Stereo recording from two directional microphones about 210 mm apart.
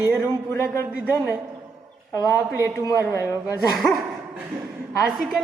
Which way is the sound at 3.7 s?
Centre (ahead or behind).